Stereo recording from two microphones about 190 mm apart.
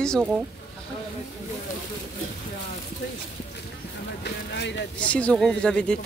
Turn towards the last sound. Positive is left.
turn(degrees=5)  # may be behind; listen again after turning